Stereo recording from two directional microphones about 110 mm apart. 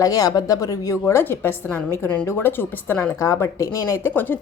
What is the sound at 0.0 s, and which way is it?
A woman's voice, 35° left (ahead or behind).